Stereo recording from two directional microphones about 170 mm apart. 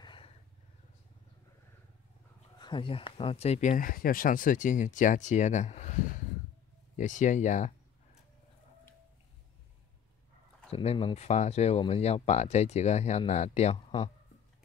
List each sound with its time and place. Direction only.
0.0 s vehicle: 30° left (ahead or behind)
2.6 s speech: 30° left (ahead or behind); by 7.7 s 45° left (ahead or behind)
10.7 s speech: 35° left (ahead or behind)